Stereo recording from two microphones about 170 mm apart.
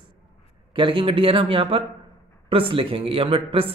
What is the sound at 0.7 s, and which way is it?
A man's voice, 30° right (ahead or behind).